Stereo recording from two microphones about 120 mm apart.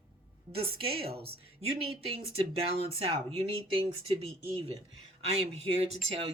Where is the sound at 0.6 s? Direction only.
50° right (ahead or behind).